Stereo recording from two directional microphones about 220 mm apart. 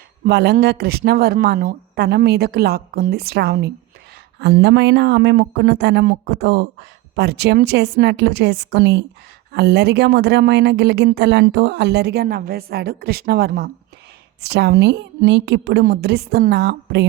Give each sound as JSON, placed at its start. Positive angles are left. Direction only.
{"t": 0.3, "sound": "speech", "side_deg": -50}